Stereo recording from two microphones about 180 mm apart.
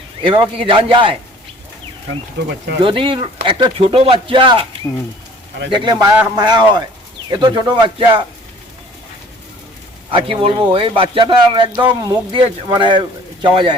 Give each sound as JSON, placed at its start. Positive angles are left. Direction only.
{"t": 0.2, "sound": "speech", "side_deg": -25}
{"t": 2.8, "sound": "speech", "side_deg": -30}
{"t": 5.7, "sound": "speech", "side_deg": -25}
{"t": 10.1, "sound": "speech", "side_deg": -30}